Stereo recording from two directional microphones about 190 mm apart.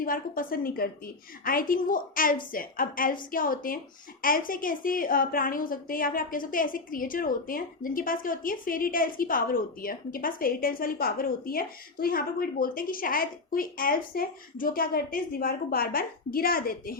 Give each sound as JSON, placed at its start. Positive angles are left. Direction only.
{"t": 0.0, "sound": "a woman's voice", "side_deg": 50}